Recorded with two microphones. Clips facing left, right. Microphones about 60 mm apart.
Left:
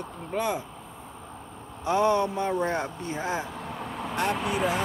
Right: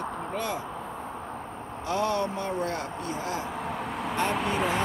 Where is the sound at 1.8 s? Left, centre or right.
Left.